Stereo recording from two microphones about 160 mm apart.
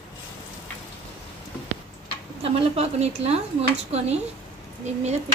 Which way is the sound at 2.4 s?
40° right (ahead or behind).